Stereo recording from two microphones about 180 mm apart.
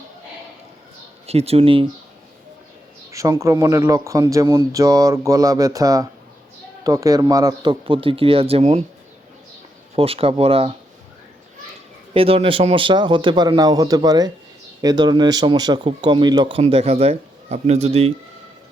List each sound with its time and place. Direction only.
1.3 s speech: 35° right (ahead or behind)
3.1 s speech: 15° right (ahead or behind); by 8.8 s 35° right (ahead or behind)
9.9 s speech: 30° right (ahead or behind)
12.1 s speech: 30° right (ahead or behind)